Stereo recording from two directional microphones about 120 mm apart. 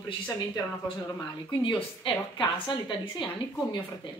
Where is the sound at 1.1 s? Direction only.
45° left (ahead or behind).